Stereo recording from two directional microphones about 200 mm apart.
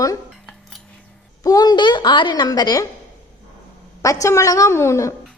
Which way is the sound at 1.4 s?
20° left (ahead or behind).